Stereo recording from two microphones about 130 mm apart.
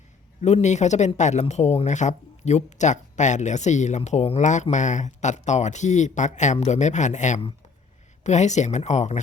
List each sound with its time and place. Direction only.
0.4 s speech: 60° left (ahead or behind)